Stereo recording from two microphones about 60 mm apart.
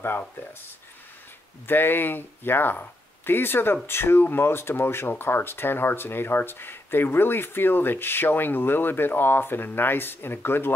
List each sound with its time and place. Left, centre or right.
1.7 s speech: left